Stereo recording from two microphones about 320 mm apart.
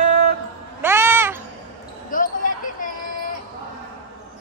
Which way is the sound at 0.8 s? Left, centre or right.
Centre.